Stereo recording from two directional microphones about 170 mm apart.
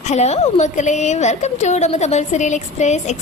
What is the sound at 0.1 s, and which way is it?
A woman's voice, 40° left (ahead or behind).